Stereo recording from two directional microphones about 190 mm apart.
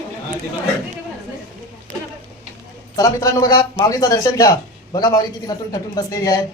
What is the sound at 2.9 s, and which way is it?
A man's voice, 20° left (ahead or behind).